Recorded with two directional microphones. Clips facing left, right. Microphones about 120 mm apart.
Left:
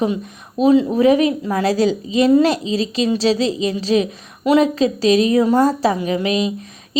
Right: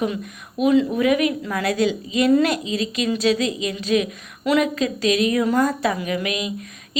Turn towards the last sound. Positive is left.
turn(degrees=30)  # may be behind; listen again after turning